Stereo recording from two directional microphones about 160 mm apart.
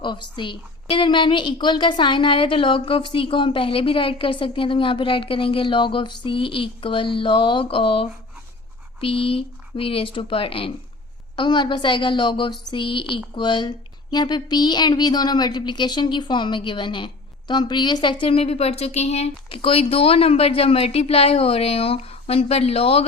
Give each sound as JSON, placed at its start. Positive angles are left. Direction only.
{"t": 0.0, "sound": "a woman's voice", "side_deg": 30}